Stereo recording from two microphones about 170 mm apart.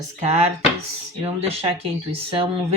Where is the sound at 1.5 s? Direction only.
35° right (ahead or behind).